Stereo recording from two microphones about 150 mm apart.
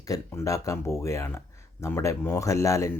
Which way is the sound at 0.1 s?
20° left (ahead or behind).